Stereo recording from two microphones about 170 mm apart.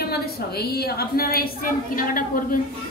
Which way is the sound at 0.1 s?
70° left (ahead or behind).